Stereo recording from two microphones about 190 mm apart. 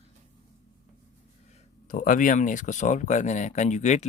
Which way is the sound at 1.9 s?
45° left (ahead or behind).